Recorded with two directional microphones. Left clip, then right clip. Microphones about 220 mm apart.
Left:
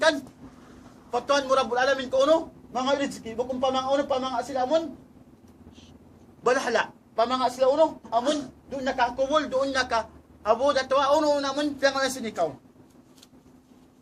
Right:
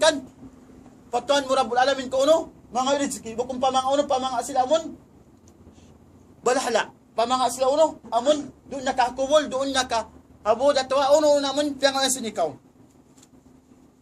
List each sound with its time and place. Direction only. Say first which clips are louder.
1.1 s a man's voice: right 1 dB; 25° right (ahead or behind)
6.4 s a man's voice: right 1 dB; 25° right (ahead or behind)